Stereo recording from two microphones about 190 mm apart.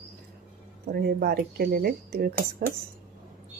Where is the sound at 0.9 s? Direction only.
55° right (ahead or behind).